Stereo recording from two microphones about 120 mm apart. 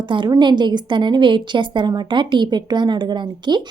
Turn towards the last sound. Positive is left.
turn(degrees=-40)  # may be behind; listen again after turning